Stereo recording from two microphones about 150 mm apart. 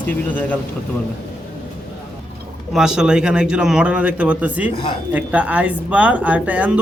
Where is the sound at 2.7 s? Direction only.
5° right (ahead or behind).